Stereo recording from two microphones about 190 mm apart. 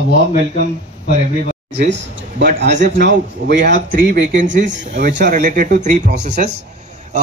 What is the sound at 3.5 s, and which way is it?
A man's voice, 45° right (ahead or behind).